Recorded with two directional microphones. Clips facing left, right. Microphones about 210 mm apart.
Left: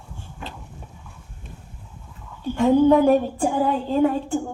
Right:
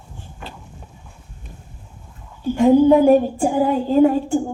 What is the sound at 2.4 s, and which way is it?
Speech, 10° right (ahead or behind).